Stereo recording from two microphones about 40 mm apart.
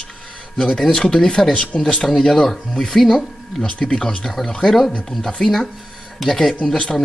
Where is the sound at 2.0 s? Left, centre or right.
Centre.